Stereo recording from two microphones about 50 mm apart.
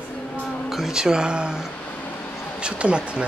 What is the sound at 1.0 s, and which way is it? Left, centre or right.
Speech, centre.